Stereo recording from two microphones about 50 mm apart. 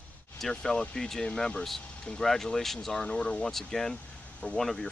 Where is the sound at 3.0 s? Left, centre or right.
Left.